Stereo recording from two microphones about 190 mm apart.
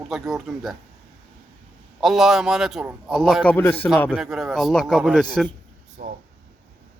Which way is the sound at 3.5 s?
10° left (ahead or behind).